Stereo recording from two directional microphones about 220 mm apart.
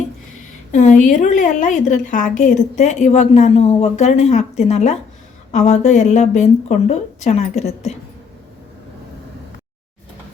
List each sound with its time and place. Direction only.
0.7 s a woman's voice: 35° left (ahead or behind)